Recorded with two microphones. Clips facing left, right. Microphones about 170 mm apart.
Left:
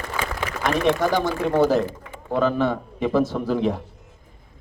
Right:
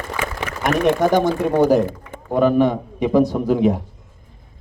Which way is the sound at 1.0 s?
20° right (ahead or behind).